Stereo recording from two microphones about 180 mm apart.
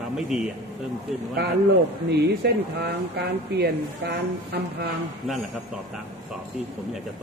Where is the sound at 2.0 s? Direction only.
65° right (ahead or behind).